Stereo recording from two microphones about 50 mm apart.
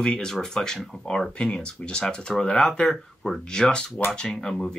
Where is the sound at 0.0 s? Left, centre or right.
Centre.